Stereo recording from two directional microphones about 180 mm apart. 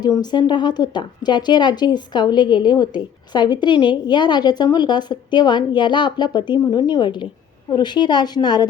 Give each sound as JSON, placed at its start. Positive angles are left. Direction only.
{"t": 0.0, "sound": "a woman's voice", "side_deg": 25}